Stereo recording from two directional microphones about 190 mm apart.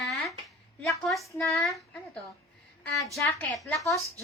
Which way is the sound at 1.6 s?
Centre (ahead or behind).